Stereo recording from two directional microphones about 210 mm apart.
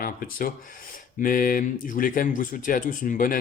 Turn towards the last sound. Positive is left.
turn(degrees=40)  # may be behind; listen again after turning